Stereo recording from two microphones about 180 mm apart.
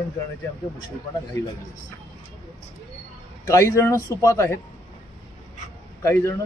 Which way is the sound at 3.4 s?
15° left (ahead or behind).